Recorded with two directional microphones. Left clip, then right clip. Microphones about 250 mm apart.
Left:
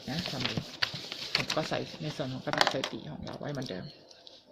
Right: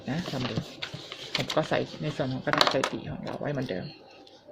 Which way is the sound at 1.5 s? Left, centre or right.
Centre.